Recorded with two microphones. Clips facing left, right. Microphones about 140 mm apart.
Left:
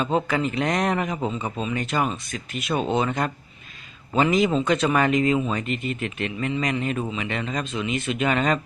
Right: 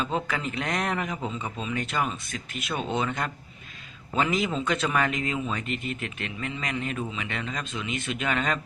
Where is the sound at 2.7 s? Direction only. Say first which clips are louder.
Left 5 dB; 30° left (ahead or behind).